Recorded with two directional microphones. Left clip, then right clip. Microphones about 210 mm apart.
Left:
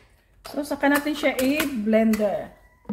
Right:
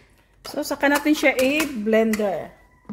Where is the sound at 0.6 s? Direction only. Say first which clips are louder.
Right 2 dB; 50° right (ahead or behind).